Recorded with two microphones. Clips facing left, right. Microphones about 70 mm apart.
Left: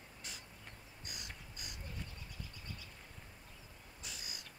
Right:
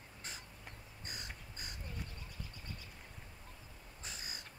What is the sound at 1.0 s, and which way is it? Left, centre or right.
Crow, right.